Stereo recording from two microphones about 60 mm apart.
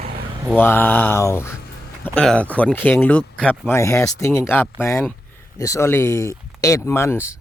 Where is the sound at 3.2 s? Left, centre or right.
Centre.